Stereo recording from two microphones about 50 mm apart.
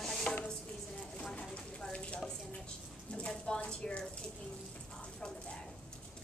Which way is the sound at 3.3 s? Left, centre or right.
Centre.